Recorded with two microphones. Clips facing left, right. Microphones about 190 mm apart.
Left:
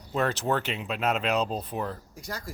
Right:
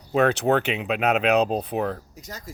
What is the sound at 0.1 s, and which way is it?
Speech, 70° right (ahead or behind).